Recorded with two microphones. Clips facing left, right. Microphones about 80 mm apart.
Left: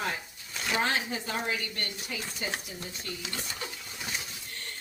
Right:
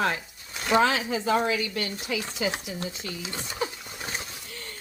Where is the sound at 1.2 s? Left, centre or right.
Right.